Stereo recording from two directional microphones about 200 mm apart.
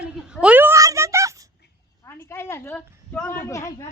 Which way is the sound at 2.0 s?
15° left (ahead or behind).